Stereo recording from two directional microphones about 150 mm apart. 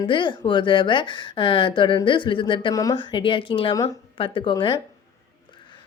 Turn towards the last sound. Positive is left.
turn(degrees=35)  # may be behind; listen again after turning